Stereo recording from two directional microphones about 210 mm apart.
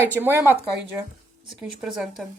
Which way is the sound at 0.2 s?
10° right (ahead or behind).